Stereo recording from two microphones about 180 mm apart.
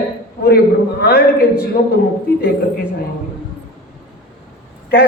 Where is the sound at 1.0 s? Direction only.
60° left (ahead or behind).